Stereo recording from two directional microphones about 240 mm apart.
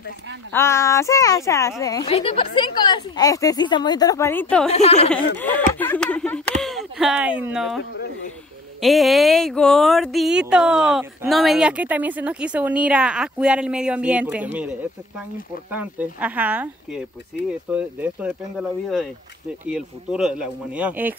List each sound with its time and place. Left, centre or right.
0.5 s a woman's voice: centre
2.0 s a woman's voice: left; by 4.6 s centre
4.6 s speech: left
5.8 s a sound: centre
8.8 s speech: centre